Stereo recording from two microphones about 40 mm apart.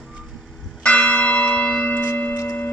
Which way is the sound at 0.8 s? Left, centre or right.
Left.